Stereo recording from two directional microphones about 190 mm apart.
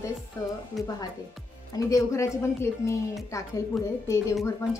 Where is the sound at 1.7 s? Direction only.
15° left (ahead or behind).